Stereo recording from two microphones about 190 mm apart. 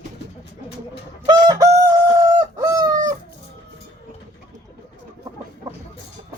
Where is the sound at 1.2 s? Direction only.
20° right (ahead or behind).